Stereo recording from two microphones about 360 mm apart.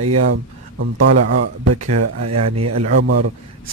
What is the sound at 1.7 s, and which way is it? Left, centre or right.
A man's voice, right.